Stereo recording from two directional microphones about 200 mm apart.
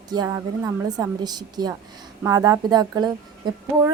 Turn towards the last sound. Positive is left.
turn(degrees=-20)  # may be behind; listen again after turning